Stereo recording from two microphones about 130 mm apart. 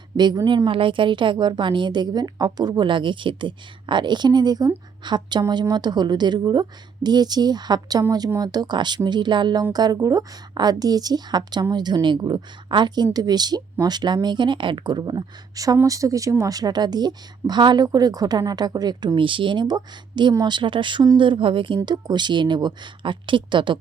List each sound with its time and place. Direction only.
0.2 s speech: 35° right (ahead or behind)